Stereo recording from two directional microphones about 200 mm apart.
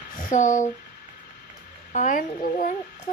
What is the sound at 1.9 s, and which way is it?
Speech, 40° left (ahead or behind).